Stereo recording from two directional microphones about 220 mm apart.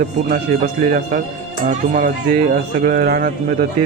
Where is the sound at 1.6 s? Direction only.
35° right (ahead or behind).